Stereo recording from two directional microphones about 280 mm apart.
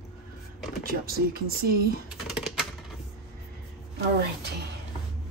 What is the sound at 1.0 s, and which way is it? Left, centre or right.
Speech, right.